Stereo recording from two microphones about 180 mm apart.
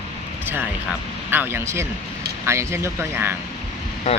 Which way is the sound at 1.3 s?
10° right (ahead or behind).